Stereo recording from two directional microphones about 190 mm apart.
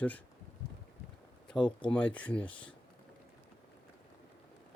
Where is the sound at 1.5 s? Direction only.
25° left (ahead or behind).